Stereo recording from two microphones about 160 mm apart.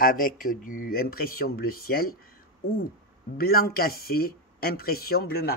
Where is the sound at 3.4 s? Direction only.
70° left (ahead or behind).